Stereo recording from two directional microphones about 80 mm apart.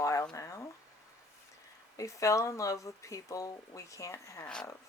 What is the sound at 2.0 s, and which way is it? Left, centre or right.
Speech, left.